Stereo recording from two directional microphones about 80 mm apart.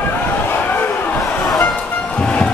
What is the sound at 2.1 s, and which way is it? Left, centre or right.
Music, centre.